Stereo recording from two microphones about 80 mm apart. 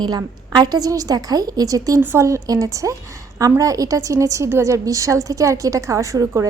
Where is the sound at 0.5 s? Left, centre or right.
Right.